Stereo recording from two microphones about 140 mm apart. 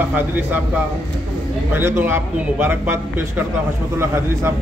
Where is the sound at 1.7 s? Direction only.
15° right (ahead or behind).